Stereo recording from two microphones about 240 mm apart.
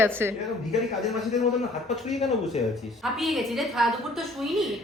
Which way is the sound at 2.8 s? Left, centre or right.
Centre.